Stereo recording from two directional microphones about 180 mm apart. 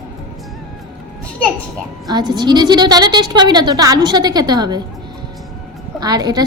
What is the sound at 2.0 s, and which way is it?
A woman's voice, 25° right (ahead or behind).